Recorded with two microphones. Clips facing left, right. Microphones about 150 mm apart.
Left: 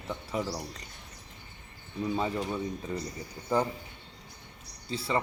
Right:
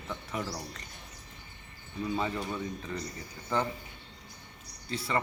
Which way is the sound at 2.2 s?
10° left (ahead or behind).